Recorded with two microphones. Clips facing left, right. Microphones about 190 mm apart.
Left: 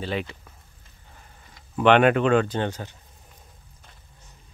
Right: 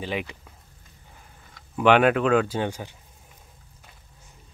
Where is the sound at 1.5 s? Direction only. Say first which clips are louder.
Left 1 dB; 5° right (ahead or behind).